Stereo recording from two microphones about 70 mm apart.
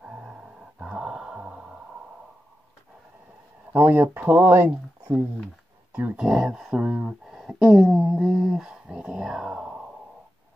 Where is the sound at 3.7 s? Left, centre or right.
Right.